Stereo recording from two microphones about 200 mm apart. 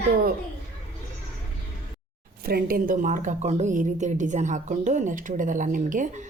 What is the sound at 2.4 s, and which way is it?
A woman's voice, 50° right (ahead or behind).